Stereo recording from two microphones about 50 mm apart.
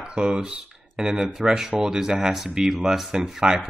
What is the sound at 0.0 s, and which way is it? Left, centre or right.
Speech, right.